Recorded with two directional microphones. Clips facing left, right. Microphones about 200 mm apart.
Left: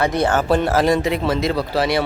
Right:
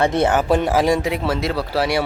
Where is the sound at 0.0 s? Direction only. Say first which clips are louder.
Right 1 dB; 25° right (ahead or behind).